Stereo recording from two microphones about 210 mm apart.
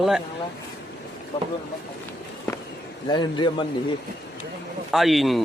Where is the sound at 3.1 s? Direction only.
20° left (ahead or behind).